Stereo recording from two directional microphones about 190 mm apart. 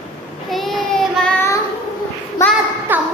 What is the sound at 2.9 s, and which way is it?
Music, 10° right (ahead or behind).